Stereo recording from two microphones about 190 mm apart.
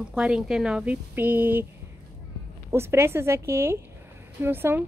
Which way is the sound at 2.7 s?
15° right (ahead or behind).